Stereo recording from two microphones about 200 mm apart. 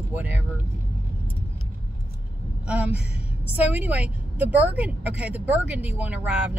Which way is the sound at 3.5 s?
10° right (ahead or behind).